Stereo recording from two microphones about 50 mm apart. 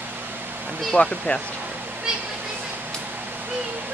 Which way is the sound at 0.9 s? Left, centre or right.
Centre.